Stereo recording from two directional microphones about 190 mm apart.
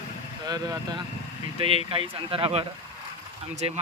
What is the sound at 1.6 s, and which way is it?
Speech, 30° right (ahead or behind).